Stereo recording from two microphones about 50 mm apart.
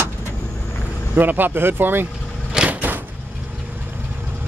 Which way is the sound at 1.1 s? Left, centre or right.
Right.